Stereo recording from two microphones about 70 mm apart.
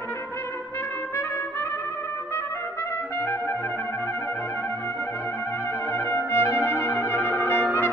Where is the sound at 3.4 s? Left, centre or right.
Left.